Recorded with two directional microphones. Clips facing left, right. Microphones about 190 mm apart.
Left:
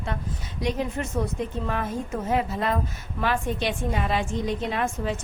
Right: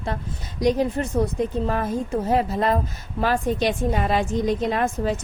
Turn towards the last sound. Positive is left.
turn(degrees=-40)  # may be behind; listen again after turning